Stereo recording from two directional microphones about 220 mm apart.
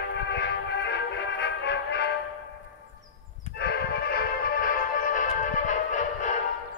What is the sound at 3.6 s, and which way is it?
Music, 50° left (ahead or behind).